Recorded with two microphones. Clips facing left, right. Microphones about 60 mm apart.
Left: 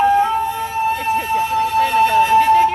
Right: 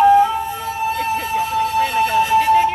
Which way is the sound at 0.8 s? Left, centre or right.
Centre.